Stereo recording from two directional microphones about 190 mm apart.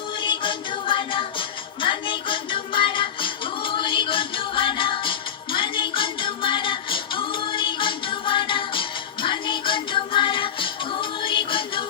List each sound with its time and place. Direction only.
0.2 s music: 25° left (ahead or behind)